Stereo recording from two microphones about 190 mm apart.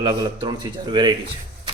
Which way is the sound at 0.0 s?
20° right (ahead or behind).